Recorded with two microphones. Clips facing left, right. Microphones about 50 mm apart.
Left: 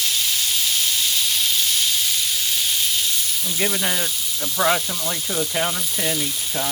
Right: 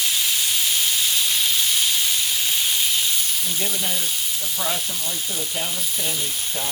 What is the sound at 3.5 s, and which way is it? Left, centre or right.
Speech, left.